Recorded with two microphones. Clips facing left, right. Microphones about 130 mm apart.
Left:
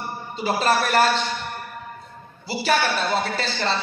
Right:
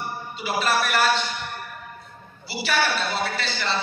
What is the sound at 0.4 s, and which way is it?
Speech, 40° left (ahead or behind).